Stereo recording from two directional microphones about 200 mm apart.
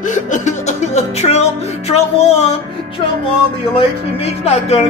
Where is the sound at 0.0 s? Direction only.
40° left (ahead or behind).